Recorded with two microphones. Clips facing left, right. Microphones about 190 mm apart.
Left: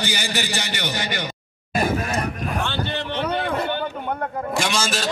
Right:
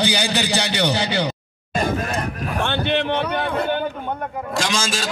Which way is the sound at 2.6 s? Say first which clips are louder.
Right 5 dB; 60° right (ahead or behind).